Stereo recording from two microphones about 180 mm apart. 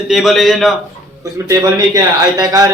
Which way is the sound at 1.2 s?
20° right (ahead or behind).